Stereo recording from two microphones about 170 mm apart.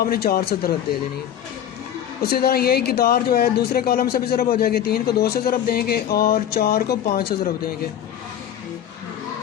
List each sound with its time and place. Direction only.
0.0 s speech: 65° left (ahead or behind)
2.2 s speech: 65° left (ahead or behind)